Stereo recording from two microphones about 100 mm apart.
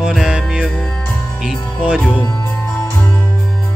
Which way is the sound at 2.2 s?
25° left (ahead or behind).